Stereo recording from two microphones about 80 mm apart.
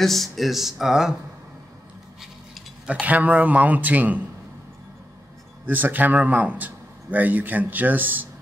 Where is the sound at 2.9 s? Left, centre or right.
Centre.